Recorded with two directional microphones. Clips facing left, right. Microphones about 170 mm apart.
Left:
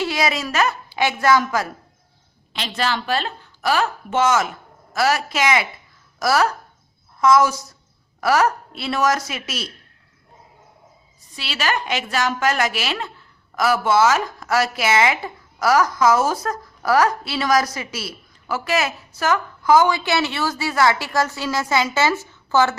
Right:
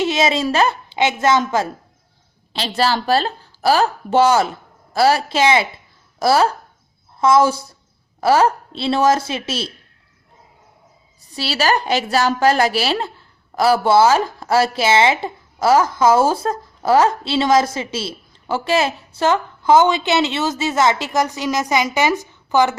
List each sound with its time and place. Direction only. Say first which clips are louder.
0.0 s a woman's voice: right 5 dB; 25° right (ahead or behind)
11.3 s a woman's voice: right 6 dB; 35° right (ahead or behind); by 22.8 s 15° right (ahead or behind)